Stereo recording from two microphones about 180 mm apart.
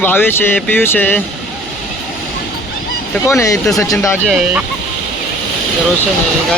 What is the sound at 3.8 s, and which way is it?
Speech, 15° left (ahead or behind).